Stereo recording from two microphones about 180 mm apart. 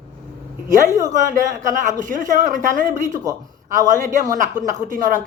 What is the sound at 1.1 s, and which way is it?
Speech, 45° right (ahead or behind).